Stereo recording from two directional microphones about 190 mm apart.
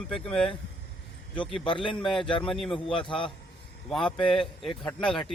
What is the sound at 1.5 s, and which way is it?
Speech, 25° left (ahead or behind).